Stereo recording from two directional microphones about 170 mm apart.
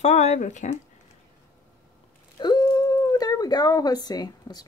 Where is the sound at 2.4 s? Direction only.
25° left (ahead or behind).